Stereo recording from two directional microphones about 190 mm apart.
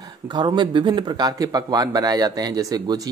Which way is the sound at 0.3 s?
25° right (ahead or behind).